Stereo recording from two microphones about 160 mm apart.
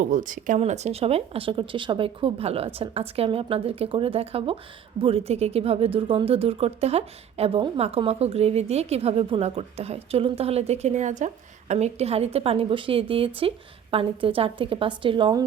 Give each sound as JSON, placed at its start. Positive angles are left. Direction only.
{"t": 0.0, "sound": "speech", "side_deg": -55}
{"t": 0.6, "sound": "speech", "side_deg": -45}